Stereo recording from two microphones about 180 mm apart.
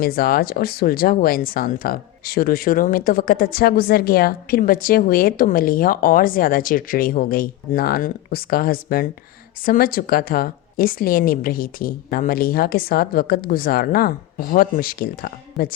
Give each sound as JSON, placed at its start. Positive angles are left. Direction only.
{"t": 0.0, "sound": "a woman's voice", "side_deg": 55}